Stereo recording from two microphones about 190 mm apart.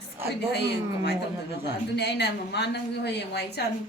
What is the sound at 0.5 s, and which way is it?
A woman's voice, 60° left (ahead or behind).